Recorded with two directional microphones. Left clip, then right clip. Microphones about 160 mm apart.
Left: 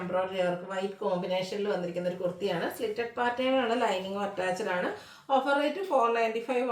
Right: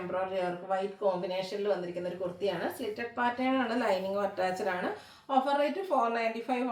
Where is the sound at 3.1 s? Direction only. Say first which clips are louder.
Left 2 dB; 15° left (ahead or behind).